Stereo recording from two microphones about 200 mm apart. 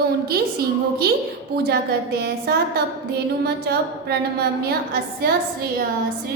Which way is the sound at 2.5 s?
55° right (ahead or behind).